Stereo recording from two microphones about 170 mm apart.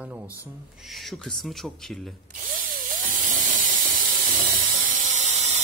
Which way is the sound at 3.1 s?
50° right (ahead or behind).